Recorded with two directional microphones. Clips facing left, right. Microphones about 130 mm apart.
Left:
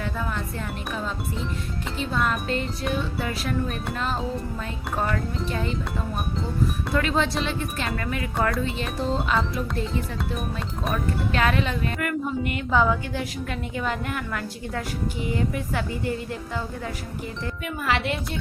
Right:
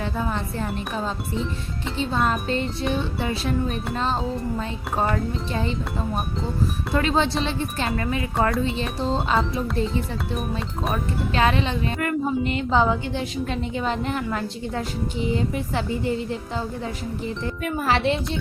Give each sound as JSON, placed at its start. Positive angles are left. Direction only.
{"t": 0.0, "sound": "music", "side_deg": -30}
{"t": 2.9, "sound": "speech", "side_deg": -25}
{"t": 6.9, "sound": "music", "side_deg": -30}
{"t": 7.9, "sound": "speech", "side_deg": -25}
{"t": 10.9, "sound": "speech", "side_deg": -25}
{"t": 17.6, "sound": "music", "side_deg": -40}